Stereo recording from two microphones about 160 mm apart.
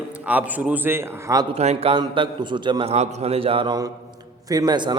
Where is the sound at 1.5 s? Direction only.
40° right (ahead or behind).